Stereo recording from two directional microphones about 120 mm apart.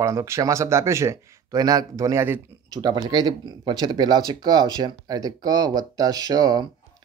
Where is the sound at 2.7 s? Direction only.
35° right (ahead or behind).